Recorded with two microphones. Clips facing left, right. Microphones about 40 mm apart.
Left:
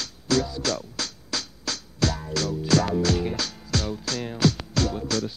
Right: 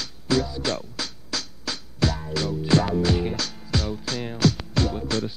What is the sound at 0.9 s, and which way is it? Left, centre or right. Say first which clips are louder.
Music: even; centre.